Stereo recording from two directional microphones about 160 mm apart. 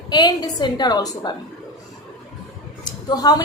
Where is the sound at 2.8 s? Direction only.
25° left (ahead or behind).